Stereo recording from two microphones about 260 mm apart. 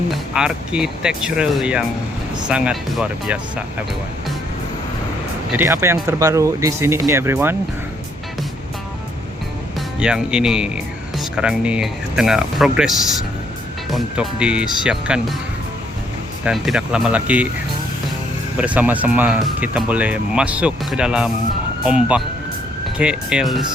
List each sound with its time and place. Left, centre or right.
0.3 s speech: centre
5.5 s speech: centre
10.0 s speech: centre
13.9 s speech: centre
16.4 s speech: centre
18.5 s speech: centre